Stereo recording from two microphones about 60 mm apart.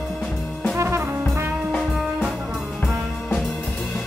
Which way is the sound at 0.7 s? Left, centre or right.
Right.